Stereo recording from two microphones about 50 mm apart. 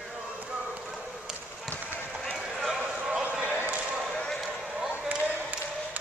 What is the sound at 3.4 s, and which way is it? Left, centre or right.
Basketball bounce, right.